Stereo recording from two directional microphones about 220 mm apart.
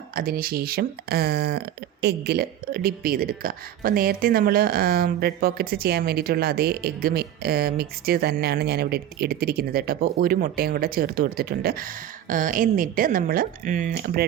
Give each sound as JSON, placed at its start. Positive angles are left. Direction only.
{"t": 0.1, "sound": "a woman's voice", "side_deg": -40}
{"t": 13.9, "sound": "speech", "side_deg": -45}